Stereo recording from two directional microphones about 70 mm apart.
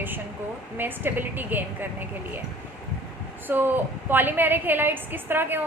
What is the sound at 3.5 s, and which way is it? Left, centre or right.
A woman's voice, right.